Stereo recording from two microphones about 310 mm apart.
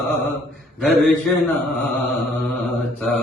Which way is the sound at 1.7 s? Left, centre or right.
Centre.